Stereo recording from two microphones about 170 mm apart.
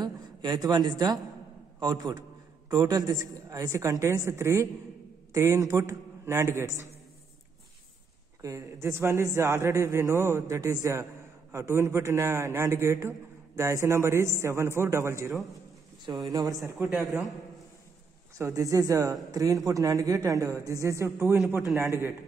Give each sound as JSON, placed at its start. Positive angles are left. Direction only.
{"t": 0.0, "sound": "a woman's voice", "side_deg": -25}
{"t": 8.4, "sound": "a man's voice", "side_deg": -20}
{"t": 18.4, "sound": "a man's voice", "side_deg": -20}